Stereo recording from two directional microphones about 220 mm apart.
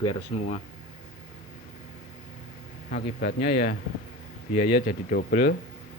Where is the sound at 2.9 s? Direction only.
45° left (ahead or behind).